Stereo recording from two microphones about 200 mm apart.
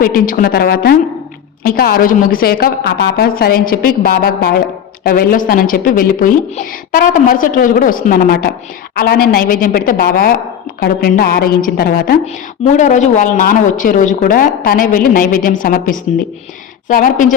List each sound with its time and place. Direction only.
0.0 s a woman's voice: 45° left (ahead or behind)
12.2 s a woman's voice: 35° left (ahead or behind)